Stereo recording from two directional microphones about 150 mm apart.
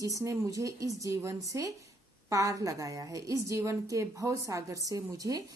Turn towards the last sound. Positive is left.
turn(degrees=-25)  # may be behind; listen again after turning